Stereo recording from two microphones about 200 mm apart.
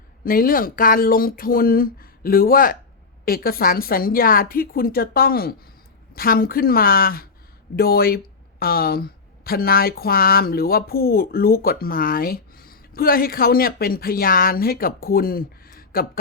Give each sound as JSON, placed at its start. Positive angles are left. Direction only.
{"t": 0.3, "sound": "speech", "side_deg": 45}